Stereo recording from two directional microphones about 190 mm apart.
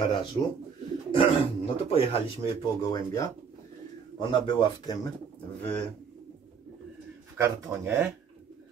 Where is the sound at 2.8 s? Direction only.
20° left (ahead or behind).